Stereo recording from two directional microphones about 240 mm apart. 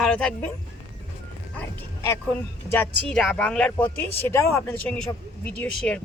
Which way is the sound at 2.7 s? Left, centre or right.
Centre.